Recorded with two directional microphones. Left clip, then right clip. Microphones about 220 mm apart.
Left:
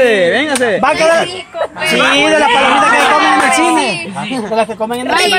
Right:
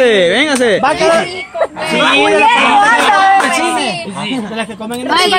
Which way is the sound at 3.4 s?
40° left (ahead or behind).